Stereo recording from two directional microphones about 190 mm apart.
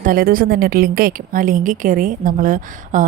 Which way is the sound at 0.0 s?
45° right (ahead or behind).